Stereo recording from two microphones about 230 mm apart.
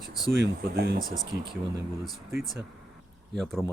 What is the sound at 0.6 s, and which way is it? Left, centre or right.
Speech, right.